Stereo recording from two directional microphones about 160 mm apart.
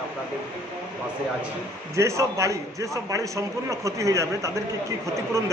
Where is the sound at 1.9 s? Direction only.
20° right (ahead or behind).